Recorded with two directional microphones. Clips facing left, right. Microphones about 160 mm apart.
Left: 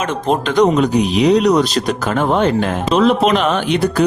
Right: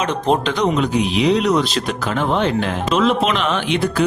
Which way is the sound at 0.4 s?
45° left (ahead or behind).